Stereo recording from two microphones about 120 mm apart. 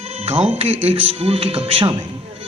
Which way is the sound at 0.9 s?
55° right (ahead or behind).